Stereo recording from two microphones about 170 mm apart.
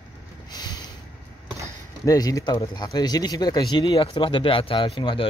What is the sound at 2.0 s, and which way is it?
Speech, 20° left (ahead or behind).